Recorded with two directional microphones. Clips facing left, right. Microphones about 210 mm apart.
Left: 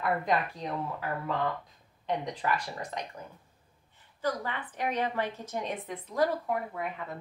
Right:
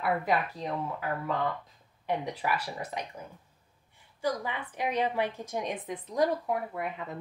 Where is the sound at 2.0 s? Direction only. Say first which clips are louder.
Even; 10° right (ahead or behind).